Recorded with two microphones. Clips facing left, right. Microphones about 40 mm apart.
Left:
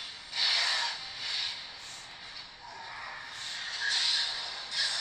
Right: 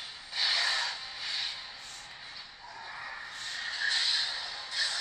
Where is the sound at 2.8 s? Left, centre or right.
Centre.